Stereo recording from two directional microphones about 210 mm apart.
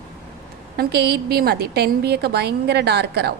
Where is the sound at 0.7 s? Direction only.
50° right (ahead or behind).